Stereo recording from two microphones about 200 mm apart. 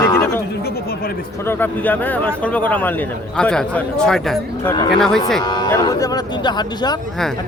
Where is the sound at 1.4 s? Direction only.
10° left (ahead or behind).